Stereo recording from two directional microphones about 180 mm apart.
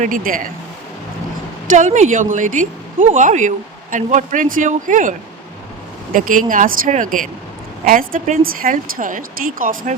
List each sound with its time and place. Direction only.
0.0 s speech: 50° right (ahead or behind)
1.7 s speech: 40° right (ahead or behind)
6.1 s speech: 50° right (ahead or behind)